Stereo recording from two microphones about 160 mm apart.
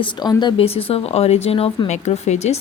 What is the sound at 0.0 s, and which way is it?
A woman's voice, 30° left (ahead or behind).